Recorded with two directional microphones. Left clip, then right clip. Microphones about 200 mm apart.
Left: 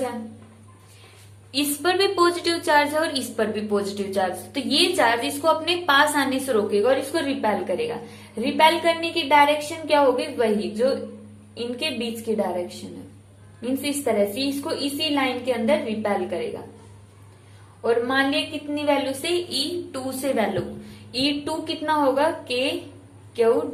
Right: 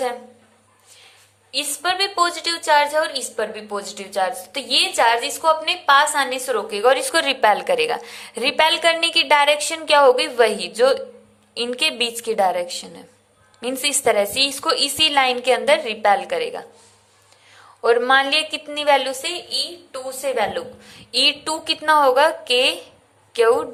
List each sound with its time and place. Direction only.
1.5 s a woman's voice: 20° right (ahead or behind); by 16.1 s 50° right (ahead or behind)
17.8 s a woman's voice: 50° right (ahead or behind)
19.2 s a woman's voice: 25° right (ahead or behind)
21.1 s a woman's voice: 40° right (ahead or behind)